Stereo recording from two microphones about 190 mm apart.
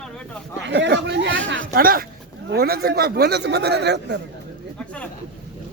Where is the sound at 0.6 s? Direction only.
65° right (ahead or behind); by 1.6 s 85° right.